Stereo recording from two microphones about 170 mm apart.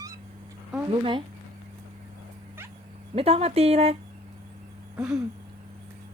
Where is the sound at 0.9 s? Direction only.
30° right (ahead or behind).